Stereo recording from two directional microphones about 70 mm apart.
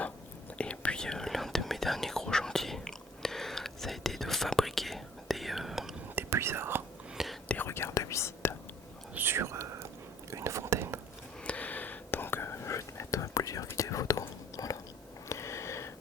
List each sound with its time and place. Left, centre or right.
0.6 s whispering: centre
6.3 s whispering: right
7.4 s whispering: left
7.7 s whispering: left
9.1 s whispering: right
11.4 s whispering: left
15.3 s sniff: left